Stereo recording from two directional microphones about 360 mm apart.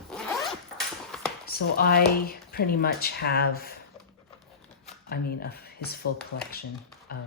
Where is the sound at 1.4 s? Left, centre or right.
Left.